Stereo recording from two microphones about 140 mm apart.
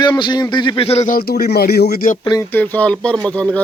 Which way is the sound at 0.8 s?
50° left (ahead or behind).